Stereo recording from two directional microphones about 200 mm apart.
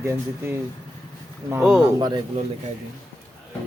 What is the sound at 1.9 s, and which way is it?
Speech, 20° right (ahead or behind).